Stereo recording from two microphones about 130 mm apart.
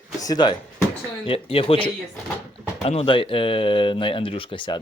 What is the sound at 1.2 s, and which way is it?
Speech, 45° left (ahead or behind).